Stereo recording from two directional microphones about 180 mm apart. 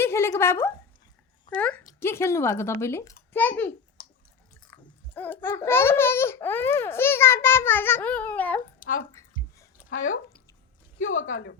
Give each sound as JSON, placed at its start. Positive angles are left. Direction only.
{"t": 0.0, "sound": "speech", "side_deg": 15}
{"t": 4.7, "sound": "speech", "side_deg": 10}
{"t": 8.8, "sound": "speech", "side_deg": 50}
{"t": 11.3, "sound": "speech", "side_deg": 90}